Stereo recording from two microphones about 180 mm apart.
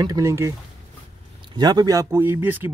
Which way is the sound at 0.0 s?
20° right (ahead or behind).